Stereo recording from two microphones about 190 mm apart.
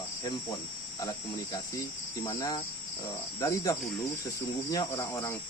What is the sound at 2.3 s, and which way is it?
Speech, 20° left (ahead or behind).